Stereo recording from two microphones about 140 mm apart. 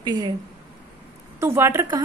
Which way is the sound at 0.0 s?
30° right (ahead or behind).